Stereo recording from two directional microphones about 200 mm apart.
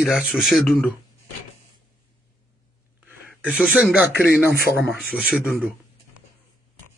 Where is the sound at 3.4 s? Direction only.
5° right (ahead or behind).